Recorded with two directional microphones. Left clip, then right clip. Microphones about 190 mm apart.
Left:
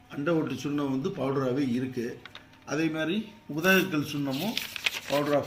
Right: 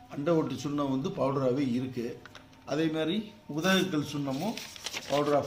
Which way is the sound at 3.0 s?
15° left (ahead or behind).